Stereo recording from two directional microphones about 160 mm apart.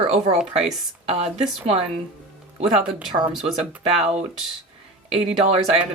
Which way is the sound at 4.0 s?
40° right (ahead or behind).